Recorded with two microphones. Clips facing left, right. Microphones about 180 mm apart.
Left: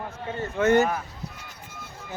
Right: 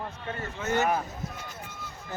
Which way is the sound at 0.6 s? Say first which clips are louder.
Left 12 dB; 70° left (ahead or behind).